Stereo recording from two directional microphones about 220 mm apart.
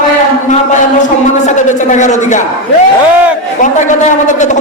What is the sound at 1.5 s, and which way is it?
Speech, 35° left (ahead or behind).